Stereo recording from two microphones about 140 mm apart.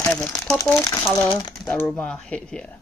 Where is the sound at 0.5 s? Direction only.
25° left (ahead or behind).